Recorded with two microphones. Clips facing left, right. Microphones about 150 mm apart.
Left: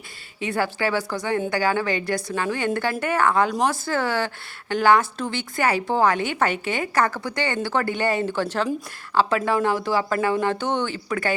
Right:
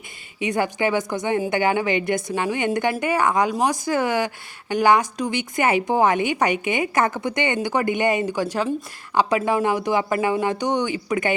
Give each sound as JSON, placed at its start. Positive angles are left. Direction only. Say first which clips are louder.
{"t": 0.3, "sound": "a woman's voice", "louder": "right 2 dB", "side_deg": -15}